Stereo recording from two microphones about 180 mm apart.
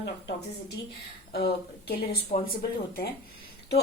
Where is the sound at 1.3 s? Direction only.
65° left (ahead or behind).